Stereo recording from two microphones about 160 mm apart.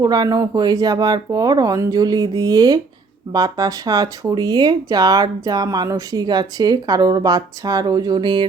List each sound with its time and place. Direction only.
0.0 s speech: 25° right (ahead or behind)